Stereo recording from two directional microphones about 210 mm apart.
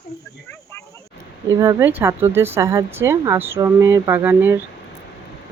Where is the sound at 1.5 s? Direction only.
15° right (ahead or behind).